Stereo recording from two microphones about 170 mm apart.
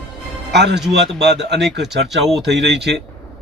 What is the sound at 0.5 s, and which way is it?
Speech, 80° right.